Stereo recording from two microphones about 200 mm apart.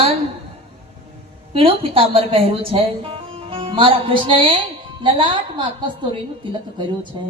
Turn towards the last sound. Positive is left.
turn(degrees=-25)  # may be behind; listen again after turning